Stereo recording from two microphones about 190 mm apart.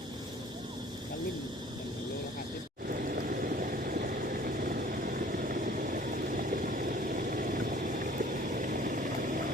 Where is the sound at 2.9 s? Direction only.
50° right (ahead or behind).